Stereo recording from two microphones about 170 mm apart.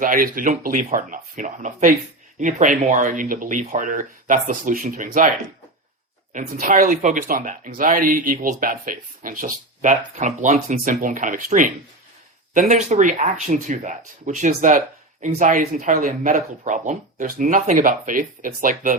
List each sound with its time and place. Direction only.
0.0 s speech: 55° right (ahead or behind)
6.3 s speech: 50° right (ahead or behind)